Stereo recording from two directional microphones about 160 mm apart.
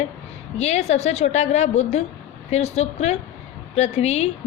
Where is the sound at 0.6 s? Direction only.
45° left (ahead or behind).